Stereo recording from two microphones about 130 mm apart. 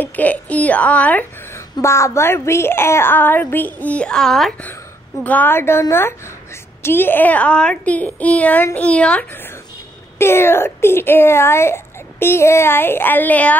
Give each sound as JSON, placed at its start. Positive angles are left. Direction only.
{"t": 0.0, "sound": "a woman's voice", "side_deg": 10}
{"t": 5.2, "sound": "a woman's voice", "side_deg": 15}